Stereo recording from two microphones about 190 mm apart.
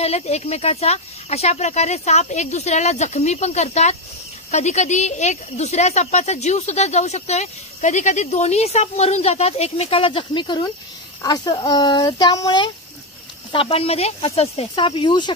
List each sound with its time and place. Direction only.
0.0 s speech: 35° left (ahead or behind)